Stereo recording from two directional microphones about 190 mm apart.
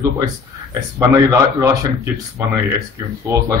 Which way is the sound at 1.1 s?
15° right (ahead or behind).